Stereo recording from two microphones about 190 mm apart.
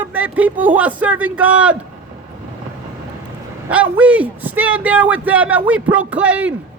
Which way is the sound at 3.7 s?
5° right (ahead or behind).